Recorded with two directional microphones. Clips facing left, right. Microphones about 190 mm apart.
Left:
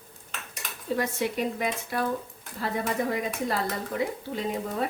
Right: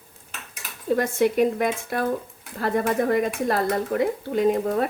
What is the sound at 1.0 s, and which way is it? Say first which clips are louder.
Speech: right 8 dB; 50° right (ahead or behind).